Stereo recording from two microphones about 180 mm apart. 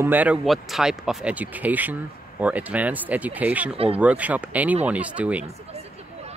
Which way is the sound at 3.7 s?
35° right (ahead or behind).